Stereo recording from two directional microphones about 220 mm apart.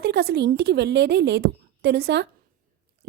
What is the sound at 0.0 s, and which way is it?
Speech, 45° right (ahead or behind).